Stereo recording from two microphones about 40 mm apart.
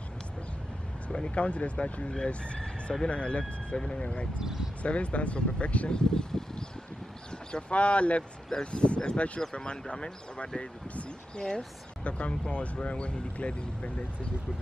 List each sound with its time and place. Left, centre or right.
1.1 s speech: left
4.4 s speech: centre
4.8 s speech: left
5.9 s speech: left
7.7 s speech: left
8.2 s speech: left
9.4 s speech: centre